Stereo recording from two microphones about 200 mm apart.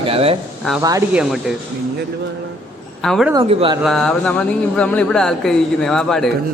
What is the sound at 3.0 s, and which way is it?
Speech, centre (ahead or behind).